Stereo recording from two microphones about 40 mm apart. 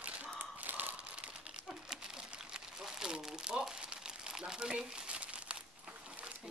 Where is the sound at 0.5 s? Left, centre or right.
Right.